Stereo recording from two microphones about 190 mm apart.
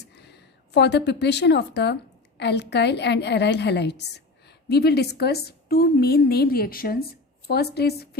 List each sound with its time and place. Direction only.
0.0 s a woman's voice: 60° left (ahead or behind)